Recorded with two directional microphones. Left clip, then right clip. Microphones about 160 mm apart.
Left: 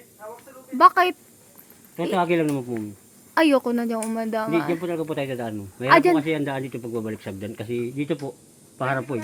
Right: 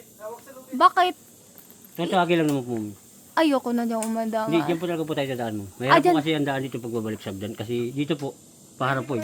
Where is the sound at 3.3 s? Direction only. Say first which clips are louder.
Left 3 dB; 15° left (ahead or behind).